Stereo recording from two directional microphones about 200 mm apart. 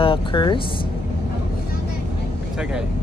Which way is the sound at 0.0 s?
25° left (ahead or behind).